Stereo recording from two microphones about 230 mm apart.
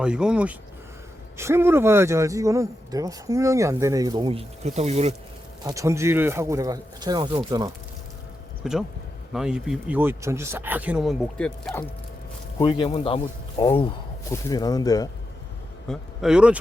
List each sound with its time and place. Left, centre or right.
0.0 s speech: centre; by 5.1 s right
5.6 s speech: centre
8.6 s speech: centre
12.5 s speech: left
15.9 s speech: centre